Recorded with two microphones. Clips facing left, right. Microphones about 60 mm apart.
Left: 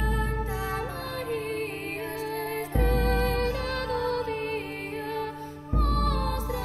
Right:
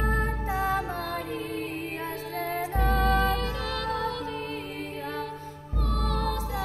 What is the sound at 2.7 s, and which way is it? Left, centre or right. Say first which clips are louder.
Music: right 1 dB; right.